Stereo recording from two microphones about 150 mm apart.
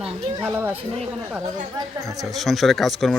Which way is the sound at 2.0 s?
25° right (ahead or behind).